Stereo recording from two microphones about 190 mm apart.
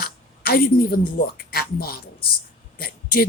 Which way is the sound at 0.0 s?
50° left (ahead or behind).